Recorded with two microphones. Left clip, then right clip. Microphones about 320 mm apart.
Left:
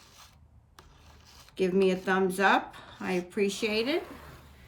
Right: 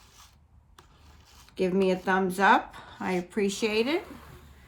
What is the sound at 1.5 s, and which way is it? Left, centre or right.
Speech, centre.